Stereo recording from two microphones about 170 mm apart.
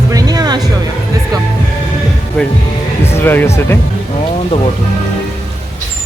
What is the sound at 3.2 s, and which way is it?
Speech, 10° left (ahead or behind).